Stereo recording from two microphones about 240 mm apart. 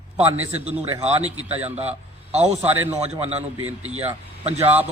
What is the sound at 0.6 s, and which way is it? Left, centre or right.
A man's voice, right.